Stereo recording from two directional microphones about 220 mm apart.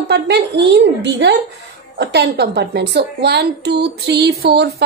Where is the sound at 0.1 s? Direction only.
50° right (ahead or behind).